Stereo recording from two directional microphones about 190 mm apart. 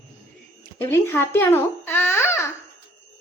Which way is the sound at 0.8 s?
15° left (ahead or behind).